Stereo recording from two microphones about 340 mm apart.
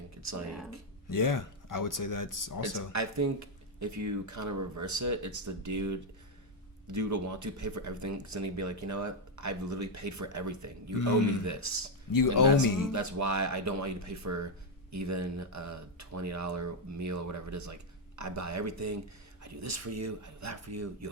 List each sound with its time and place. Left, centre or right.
0.2 s speech: right
1.1 s speech: left
2.9 s speech: right
10.9 s speech: left
11.4 s speech: right
12.4 s speech: left
12.9 s speech: right